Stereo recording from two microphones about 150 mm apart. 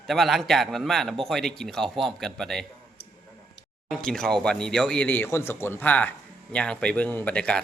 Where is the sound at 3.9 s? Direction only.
5° left (ahead or behind).